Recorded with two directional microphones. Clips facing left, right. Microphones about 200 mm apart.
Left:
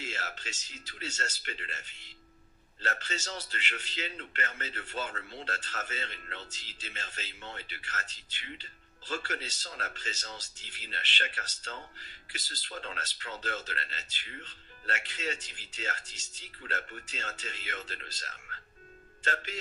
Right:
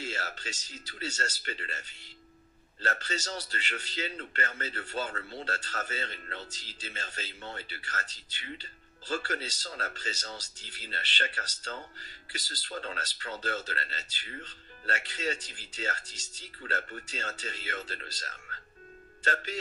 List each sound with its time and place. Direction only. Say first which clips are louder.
0.0 s speech: right 3 dB; 35° right (ahead or behind)